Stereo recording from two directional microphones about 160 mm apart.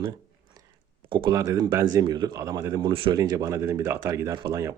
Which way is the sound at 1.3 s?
20° right (ahead or behind).